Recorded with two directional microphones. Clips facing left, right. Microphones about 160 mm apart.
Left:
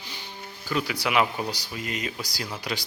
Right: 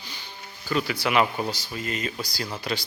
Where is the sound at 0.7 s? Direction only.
10° left (ahead or behind).